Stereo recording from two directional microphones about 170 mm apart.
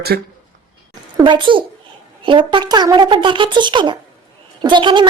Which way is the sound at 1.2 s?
30° right (ahead or behind).